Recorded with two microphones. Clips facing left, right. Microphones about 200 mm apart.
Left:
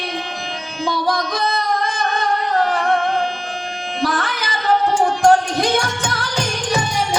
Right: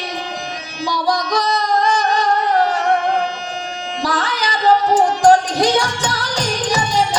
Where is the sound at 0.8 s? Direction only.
55° left (ahead or behind).